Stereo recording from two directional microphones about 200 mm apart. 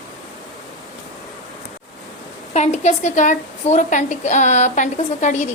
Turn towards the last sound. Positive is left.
turn(degrees=35)  # may be behind; listen again after turning